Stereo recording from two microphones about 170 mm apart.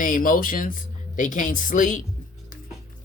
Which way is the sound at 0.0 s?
55° left (ahead or behind).